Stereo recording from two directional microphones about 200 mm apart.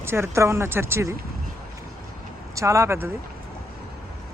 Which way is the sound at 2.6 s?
15° right (ahead or behind).